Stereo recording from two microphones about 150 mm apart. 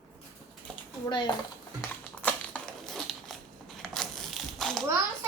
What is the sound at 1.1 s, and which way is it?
Speech, 30° left (ahead or behind).